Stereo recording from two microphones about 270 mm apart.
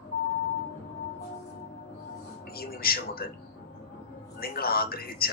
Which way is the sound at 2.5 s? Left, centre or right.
Left.